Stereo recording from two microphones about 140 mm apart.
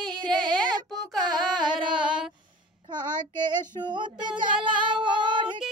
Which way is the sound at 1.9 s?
5° right (ahead or behind).